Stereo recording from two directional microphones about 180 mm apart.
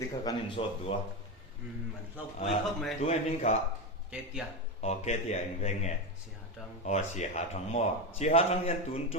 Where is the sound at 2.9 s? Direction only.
40° left (ahead or behind).